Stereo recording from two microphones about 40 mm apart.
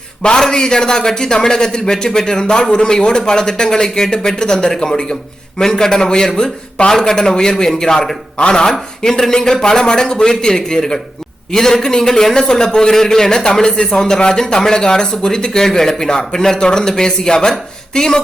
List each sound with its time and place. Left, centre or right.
0.2 s a man's voice: left